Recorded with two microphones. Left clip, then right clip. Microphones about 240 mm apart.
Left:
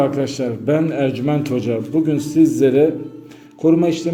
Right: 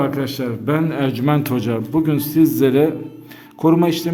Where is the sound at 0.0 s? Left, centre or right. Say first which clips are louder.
Left 3 dB; centre.